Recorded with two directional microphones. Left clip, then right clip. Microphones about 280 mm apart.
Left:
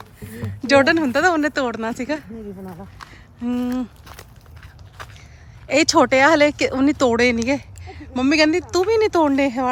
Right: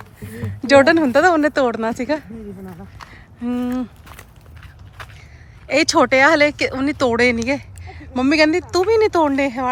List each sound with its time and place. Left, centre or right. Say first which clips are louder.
0.0 s speech: right 2 dB; centre
3.0 s a sound: right 2 dB; centre
5.6 s speech: even; centre